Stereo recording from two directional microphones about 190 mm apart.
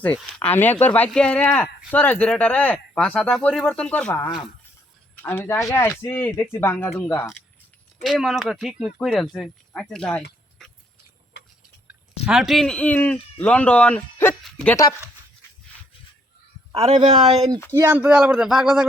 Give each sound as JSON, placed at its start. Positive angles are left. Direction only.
{"t": 0.0, "sound": "speech", "side_deg": 10}
{"t": 10.6, "sound": "a sound", "side_deg": 0}
{"t": 11.9, "sound": "speech", "side_deg": -5}
{"t": 14.4, "sound": "a sound", "side_deg": 5}
{"t": 16.7, "sound": "a man's voice", "side_deg": -30}
{"t": 17.7, "sound": "speech", "side_deg": -15}